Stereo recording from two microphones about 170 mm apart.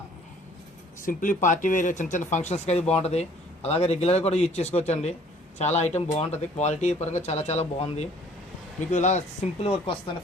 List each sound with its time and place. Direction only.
1.0 s a man's voice: 50° left (ahead or behind)